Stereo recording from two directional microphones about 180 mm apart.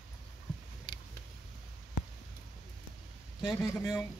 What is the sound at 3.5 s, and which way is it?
Speech, 15° left (ahead or behind).